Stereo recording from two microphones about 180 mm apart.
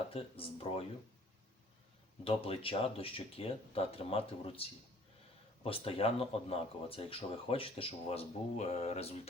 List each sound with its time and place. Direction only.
0.1 s speech: 30° left (ahead or behind)
2.2 s speech: 30° left (ahead or behind)